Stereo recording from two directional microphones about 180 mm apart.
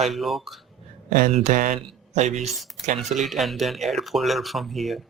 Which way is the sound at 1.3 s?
40° right (ahead or behind).